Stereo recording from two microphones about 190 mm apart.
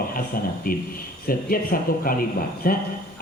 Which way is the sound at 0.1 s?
50° left (ahead or behind).